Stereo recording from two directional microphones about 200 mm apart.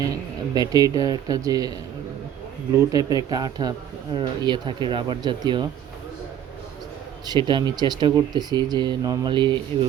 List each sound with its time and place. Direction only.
0.0 s speech: 20° right (ahead or behind)
2.7 s speech: 20° right (ahead or behind)
7.3 s speech: 20° right (ahead or behind)